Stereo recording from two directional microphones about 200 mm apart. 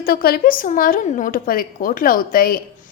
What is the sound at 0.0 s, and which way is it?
A woman's voice, 50° left (ahead or behind).